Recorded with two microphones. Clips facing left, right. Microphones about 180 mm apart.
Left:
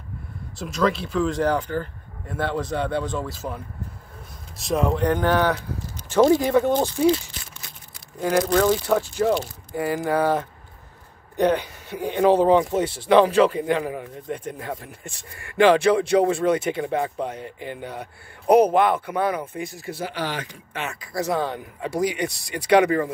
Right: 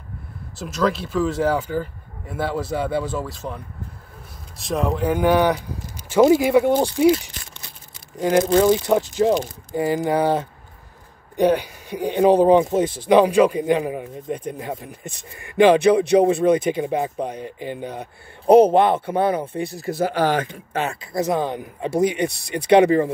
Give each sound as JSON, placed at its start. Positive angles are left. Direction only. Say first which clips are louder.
{"t": 0.6, "sound": "speech", "louder": "right 1 dB", "side_deg": 0}
{"t": 20.7, "sound": "speech", "louder": "right 5 dB", "side_deg": -35}